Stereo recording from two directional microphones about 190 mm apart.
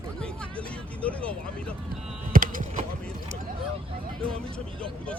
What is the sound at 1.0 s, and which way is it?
Speech, 5° left (ahead or behind).